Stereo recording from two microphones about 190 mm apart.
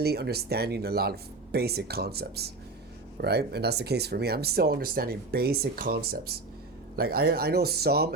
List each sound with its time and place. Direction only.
0.0 s speech: 55° right (ahead or behind)